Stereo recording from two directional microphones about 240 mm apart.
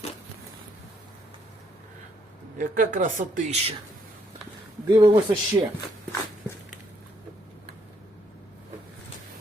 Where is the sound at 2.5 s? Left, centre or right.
Right.